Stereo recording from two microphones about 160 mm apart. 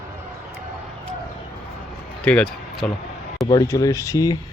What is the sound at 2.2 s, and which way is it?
Speech, 5° left (ahead or behind).